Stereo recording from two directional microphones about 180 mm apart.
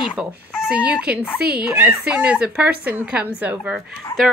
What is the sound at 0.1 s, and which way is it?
A woman's voice, 5° right (ahead or behind).